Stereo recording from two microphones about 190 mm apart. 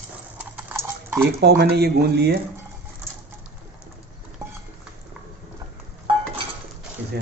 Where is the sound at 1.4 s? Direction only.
55° right (ahead or behind).